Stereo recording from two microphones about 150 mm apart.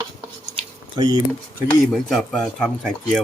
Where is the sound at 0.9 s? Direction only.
25° right (ahead or behind).